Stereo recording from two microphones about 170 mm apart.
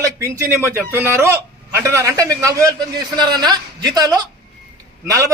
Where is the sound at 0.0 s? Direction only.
15° right (ahead or behind).